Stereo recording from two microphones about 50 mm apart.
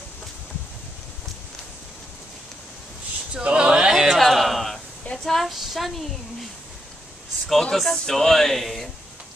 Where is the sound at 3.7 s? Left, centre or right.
Centre.